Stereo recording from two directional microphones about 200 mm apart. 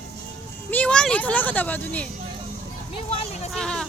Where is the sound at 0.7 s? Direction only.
5° left (ahead or behind).